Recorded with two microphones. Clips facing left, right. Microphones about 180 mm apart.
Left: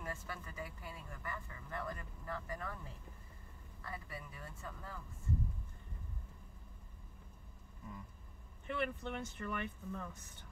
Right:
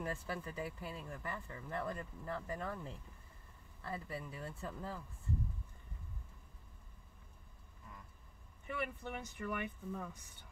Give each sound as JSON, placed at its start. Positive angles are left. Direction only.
{"t": 0.0, "sound": "speech", "side_deg": -30}
{"t": 8.7, "sound": "speech", "side_deg": -10}